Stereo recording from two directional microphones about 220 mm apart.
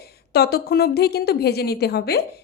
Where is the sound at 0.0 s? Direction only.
45° left (ahead or behind).